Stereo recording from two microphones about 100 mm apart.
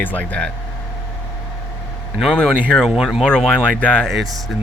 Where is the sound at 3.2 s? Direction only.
10° left (ahead or behind).